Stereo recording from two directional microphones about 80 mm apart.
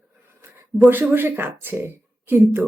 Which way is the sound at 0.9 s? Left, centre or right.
Right.